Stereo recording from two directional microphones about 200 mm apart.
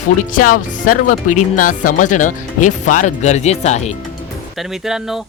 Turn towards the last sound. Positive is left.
turn(degrees=0)  # may be behind; listen again after turning